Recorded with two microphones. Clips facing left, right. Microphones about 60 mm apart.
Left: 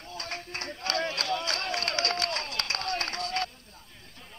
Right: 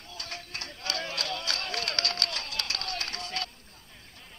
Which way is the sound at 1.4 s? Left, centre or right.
Left.